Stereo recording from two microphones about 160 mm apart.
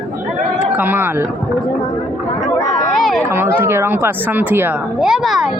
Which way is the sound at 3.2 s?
15° right (ahead or behind).